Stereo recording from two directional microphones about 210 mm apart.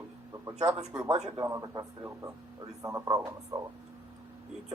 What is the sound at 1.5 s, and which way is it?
A man's voice, 15° right (ahead or behind).